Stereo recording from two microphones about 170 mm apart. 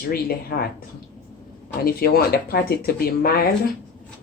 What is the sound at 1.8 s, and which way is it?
Speech, 65° left (ahead or behind).